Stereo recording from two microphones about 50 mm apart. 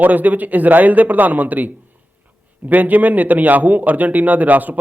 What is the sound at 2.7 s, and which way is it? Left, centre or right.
A man's voice, right.